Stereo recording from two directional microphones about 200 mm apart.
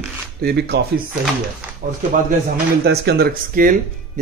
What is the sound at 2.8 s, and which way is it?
Speech, 55° right (ahead or behind).